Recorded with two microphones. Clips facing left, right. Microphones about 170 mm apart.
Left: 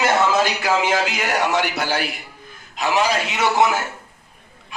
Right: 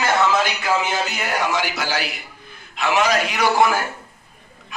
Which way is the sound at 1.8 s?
55° left (ahead or behind).